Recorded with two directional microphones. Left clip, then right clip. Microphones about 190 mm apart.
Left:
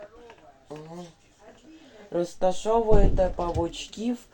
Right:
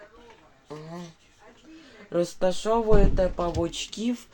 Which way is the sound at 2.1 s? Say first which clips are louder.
Even; 20° right (ahead or behind).